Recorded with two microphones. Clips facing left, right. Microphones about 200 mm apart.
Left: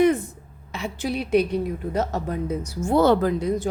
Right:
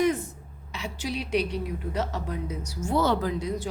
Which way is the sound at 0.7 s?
50° left (ahead or behind).